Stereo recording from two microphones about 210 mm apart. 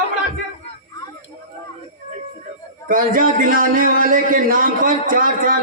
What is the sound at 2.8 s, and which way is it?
A man's voice, 40° right (ahead or behind).